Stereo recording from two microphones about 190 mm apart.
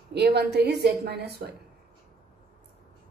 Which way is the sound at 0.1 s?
60° right (ahead or behind).